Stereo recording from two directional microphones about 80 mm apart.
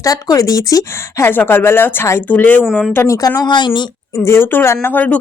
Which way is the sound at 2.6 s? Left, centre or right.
Centre.